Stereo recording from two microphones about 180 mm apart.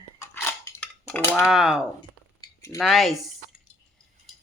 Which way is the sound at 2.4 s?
15° left (ahead or behind).